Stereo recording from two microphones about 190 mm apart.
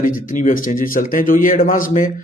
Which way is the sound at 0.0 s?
45° left (ahead or behind).